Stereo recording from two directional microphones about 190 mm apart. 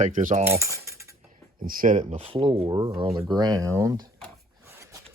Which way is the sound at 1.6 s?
45° right (ahead or behind).